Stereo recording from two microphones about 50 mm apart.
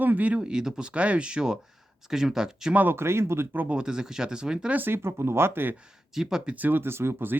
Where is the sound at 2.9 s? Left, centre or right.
Right.